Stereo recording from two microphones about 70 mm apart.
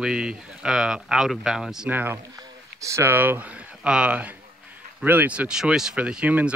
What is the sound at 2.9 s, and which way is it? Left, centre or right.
Speech, right.